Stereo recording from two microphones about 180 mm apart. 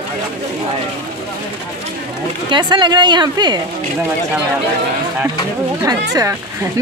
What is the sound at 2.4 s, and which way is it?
Speech, 25° right (ahead or behind).